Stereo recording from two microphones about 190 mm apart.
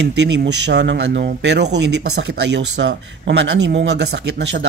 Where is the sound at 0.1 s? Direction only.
65° right (ahead or behind).